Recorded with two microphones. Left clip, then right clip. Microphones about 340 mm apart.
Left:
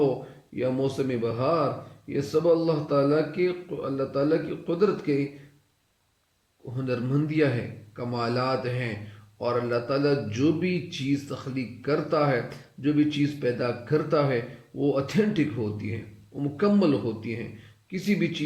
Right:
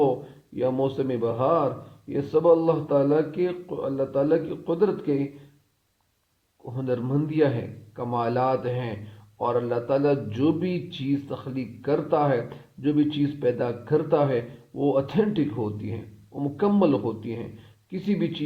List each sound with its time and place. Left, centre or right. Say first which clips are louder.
0.5 s speech: right 2 dB; centre
6.7 s speech: right 2 dB; centre
16.4 s speech: right 1 dB; centre